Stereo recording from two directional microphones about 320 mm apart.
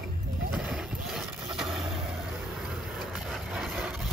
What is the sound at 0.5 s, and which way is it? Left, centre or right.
Vehicle, centre.